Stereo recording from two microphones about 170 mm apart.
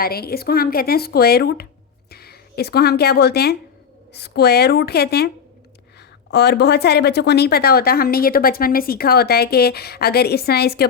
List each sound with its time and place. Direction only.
0.0 s a woman's voice: 65° left (ahead or behind)
6.3 s a woman's voice: 80° left